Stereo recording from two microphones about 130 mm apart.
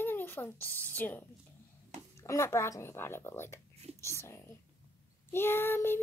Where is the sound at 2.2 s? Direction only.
20° left (ahead or behind).